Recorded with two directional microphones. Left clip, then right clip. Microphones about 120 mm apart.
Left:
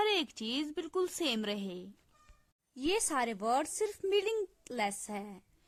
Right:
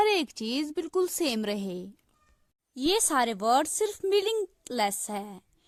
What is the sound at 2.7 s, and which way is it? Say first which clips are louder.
Speech: right 7 dB; 45° right (ahead or behind).